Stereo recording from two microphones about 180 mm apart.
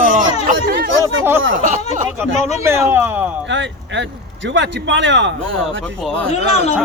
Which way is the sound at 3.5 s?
90° right.